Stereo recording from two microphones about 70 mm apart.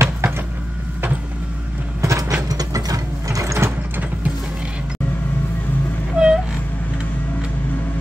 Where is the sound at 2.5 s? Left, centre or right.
Right.